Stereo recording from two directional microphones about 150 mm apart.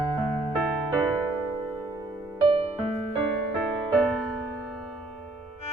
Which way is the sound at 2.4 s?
40° right (ahead or behind).